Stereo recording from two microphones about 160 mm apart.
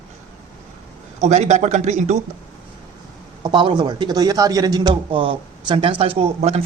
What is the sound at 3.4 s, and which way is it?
A man's voice, 30° right (ahead or behind).